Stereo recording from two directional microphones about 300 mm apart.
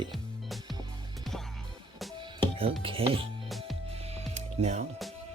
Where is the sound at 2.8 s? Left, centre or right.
Centre.